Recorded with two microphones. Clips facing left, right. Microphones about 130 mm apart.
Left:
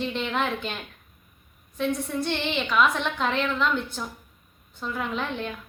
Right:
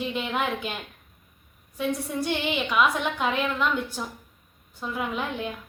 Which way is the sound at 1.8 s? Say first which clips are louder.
Left 1 dB; 10° right (ahead or behind).